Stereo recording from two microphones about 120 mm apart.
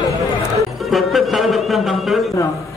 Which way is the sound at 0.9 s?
Centre (ahead or behind).